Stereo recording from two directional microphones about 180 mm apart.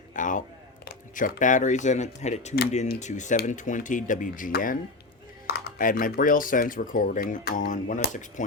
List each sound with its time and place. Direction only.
0.1 s a sound: 45° left (ahead or behind)
0.9 s speech: 55° left (ahead or behind)
5.5 s speech: 60° left (ahead or behind); by 8.4 s 45° left (ahead or behind)